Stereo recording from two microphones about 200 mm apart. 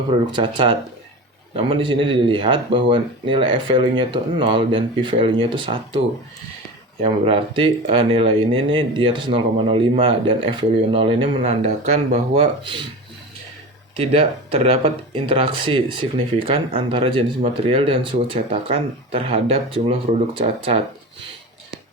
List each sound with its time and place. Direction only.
0.3 s speech: 25° right (ahead or behind)
7.0 s speech: 30° right (ahead or behind)
13.9 s speech: 30° right (ahead or behind)